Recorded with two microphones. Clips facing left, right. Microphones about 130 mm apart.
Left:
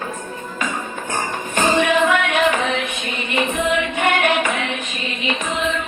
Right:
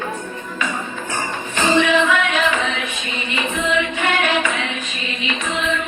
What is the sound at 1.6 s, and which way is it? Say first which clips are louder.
Music: even; 50° left (ahead or behind).